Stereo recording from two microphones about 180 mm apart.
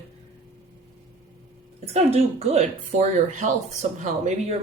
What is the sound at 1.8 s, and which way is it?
Speech, 35° right (ahead or behind).